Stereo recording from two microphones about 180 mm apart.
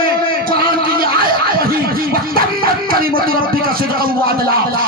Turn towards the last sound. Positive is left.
turn(degrees=-55)  # may be behind; listen again after turning